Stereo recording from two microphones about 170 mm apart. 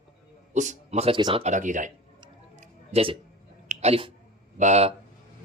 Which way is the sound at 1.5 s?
50° right (ahead or behind).